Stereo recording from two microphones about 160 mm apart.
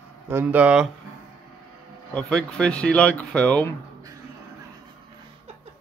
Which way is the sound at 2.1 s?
5° left (ahead or behind).